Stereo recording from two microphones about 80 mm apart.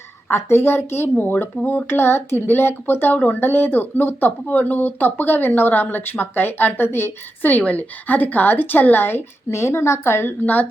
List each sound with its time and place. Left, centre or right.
0.3 s speech: left
10.4 s speech: centre